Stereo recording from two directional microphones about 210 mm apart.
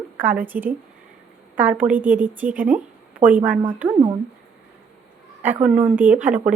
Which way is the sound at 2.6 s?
35° right (ahead or behind).